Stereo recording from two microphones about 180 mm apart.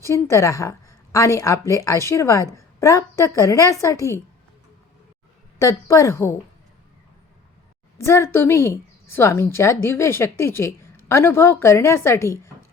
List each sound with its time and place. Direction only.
0.0 s a woman's voice: 15° left (ahead or behind)
5.5 s a woman's voice: 15° left (ahead or behind)
7.9 s a woman's voice: 15° left (ahead or behind)